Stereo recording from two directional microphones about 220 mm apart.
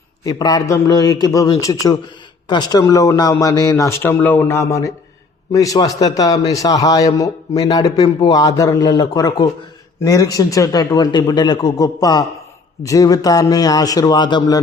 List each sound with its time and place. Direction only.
0.3 s a man's voice: 15° left (ahead or behind)